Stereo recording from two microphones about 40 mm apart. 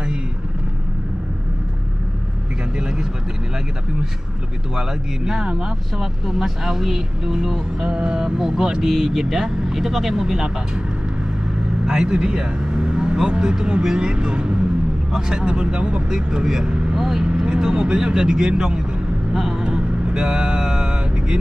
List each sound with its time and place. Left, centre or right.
4.7 s speech: centre
6.2 s speech: centre
7.8 s speech: right
11.8 s speech: centre
16.9 s speech: centre
19.6 s vehicle: right